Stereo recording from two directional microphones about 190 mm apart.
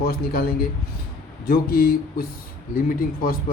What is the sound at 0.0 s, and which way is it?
Speech, 55° left (ahead or behind).